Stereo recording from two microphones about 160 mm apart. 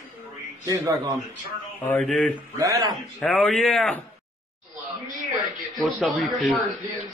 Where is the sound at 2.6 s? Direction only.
20° right (ahead or behind).